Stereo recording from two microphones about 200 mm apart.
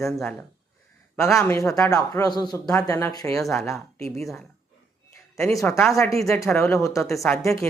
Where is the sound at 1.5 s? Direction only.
15° left (ahead or behind).